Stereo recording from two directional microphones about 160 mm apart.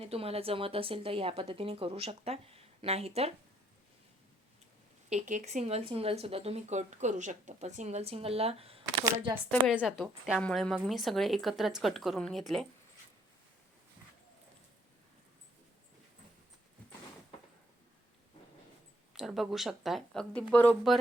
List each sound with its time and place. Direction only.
0.0 s speech: 40° right (ahead or behind)
5.0 s speech: 50° right (ahead or behind)
9.7 s speech: centre (ahead or behind)
19.1 s speech: centre (ahead or behind)